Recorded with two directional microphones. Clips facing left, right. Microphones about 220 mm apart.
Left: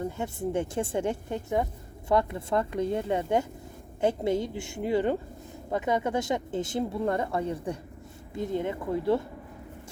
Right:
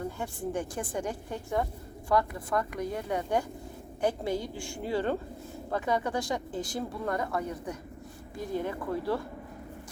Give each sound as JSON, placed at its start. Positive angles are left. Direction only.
{"t": 0.0, "sound": "speech", "side_deg": 25}